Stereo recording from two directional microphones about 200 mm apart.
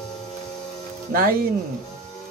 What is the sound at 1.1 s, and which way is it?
Speech, 45° right (ahead or behind).